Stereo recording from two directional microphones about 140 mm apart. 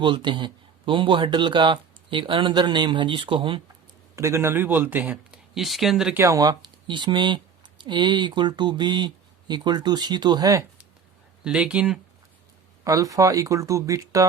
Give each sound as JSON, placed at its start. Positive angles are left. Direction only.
{"t": 0.0, "sound": "speech", "side_deg": -35}
{"t": 4.1, "sound": "speech", "side_deg": -20}
{"t": 6.1, "sound": "speech", "side_deg": -25}
{"t": 11.4, "sound": "speech", "side_deg": -5}
{"t": 12.8, "sound": "speech", "side_deg": -25}